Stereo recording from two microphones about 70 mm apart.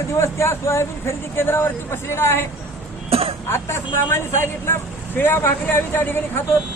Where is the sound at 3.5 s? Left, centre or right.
Left.